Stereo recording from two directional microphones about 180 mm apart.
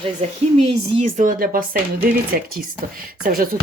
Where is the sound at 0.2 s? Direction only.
35° right (ahead or behind).